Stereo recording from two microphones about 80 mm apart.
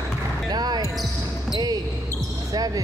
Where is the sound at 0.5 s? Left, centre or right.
Right.